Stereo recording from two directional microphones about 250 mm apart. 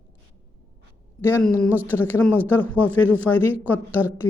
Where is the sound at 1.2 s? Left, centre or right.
Centre.